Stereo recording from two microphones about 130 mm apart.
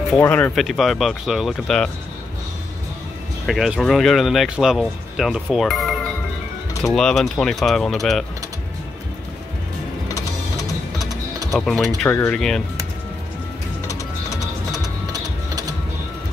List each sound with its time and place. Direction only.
0.2 s speech: 10° left (ahead or behind)
3.4 s speech: centre (ahead or behind)
10.0 s music: 25° left (ahead or behind)
11.5 s speech: 5° left (ahead or behind)
15.1 s music: 30° right (ahead or behind)